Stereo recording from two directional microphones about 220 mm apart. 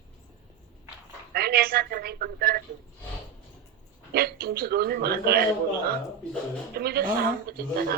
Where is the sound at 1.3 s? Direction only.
45° right (ahead or behind).